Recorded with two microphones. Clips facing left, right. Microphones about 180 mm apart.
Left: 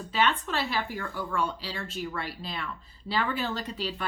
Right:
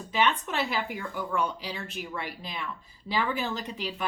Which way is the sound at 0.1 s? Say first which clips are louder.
Even; 15° right (ahead or behind).